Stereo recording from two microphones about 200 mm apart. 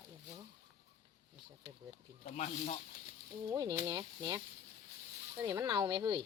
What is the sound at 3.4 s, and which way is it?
Speech, 20° right (ahead or behind).